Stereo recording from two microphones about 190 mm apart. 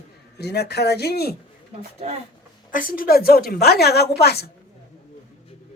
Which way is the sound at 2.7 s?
50° left (ahead or behind).